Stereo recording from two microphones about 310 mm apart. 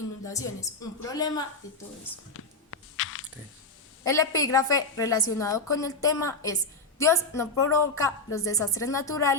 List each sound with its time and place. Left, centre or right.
0.3 s a woman's voice: centre
2.3 s a sound: left
4.0 s a woman's voice: centre